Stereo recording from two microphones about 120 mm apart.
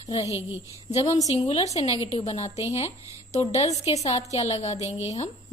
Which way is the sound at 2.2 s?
65° left (ahead or behind).